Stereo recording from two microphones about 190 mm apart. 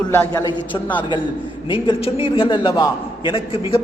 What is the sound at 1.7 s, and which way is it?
A man's voice, 30° left (ahead or behind).